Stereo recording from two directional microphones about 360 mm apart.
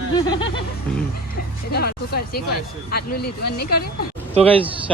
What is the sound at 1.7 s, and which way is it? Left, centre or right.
Speech, left.